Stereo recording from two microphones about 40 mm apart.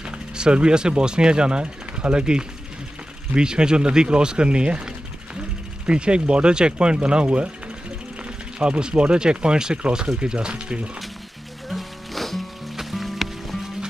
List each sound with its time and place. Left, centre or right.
0.0 s speech: right
8.5 s speech: right
11.7 s music: centre